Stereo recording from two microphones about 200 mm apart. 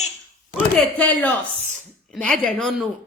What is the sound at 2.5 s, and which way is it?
Speech, centre (ahead or behind).